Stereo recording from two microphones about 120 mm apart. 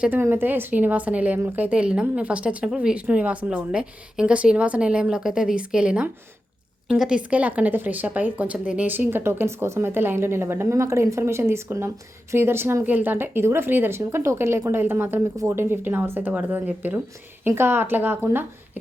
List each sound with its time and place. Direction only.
0.0 s a woman's voice: 15° right (ahead or behind)